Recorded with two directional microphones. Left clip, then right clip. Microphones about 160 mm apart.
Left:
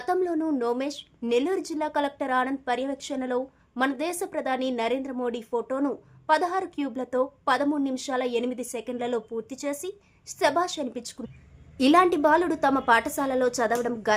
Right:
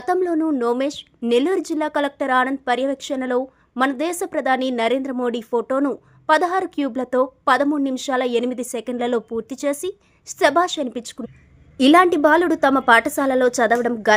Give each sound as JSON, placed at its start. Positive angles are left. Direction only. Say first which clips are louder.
{"t": 0.0, "sound": "a woman's voice", "louder": "right 6 dB", "side_deg": -30}